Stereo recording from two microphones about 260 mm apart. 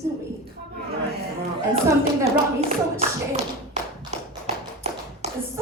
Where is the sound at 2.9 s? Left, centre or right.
Right.